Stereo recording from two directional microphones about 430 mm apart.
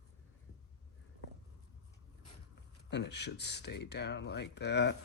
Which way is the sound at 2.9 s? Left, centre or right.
Left.